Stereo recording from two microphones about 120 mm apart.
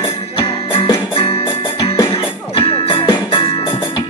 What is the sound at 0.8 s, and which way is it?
Music, 50° left (ahead or behind).